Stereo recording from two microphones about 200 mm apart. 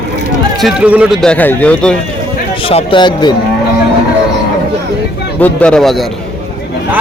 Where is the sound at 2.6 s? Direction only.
25° left (ahead or behind).